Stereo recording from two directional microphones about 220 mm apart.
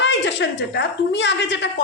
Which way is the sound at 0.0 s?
55° left (ahead or behind).